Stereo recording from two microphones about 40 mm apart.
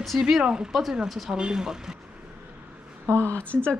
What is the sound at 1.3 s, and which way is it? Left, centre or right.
Speech, centre.